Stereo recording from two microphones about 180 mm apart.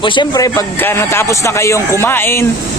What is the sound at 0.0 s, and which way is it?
A man's voice, 25° left (ahead or behind).